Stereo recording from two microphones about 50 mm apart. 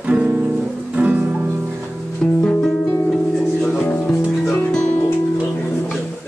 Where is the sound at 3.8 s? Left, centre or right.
Left.